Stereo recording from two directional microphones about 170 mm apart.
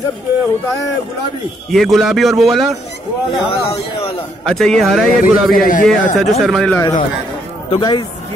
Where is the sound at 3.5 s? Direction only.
35° left (ahead or behind).